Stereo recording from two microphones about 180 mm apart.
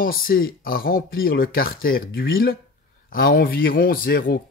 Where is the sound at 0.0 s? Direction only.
55° left (ahead or behind).